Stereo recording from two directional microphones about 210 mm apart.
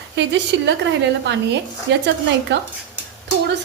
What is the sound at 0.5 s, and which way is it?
Speech, 55° right (ahead or behind).